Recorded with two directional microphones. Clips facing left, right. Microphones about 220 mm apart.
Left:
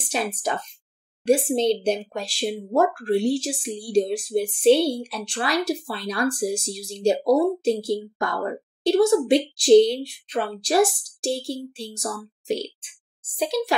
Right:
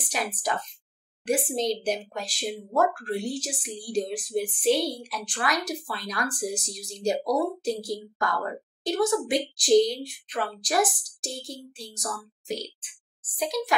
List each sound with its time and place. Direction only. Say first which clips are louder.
0.0 s a woman's voice: left 4 dB; 25° left (ahead or behind)